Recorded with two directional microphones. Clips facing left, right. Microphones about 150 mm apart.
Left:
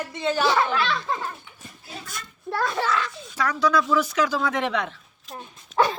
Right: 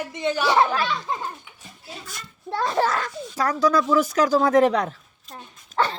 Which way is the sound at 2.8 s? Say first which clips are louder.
Right 3 dB; 45° right (ahead or behind).